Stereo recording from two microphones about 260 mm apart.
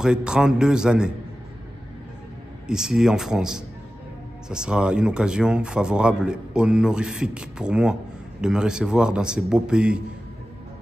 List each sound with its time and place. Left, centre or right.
0.0 s speech: centre
2.6 s speech: centre